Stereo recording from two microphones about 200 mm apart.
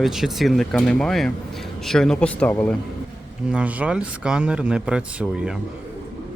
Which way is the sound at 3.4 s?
5° right (ahead or behind).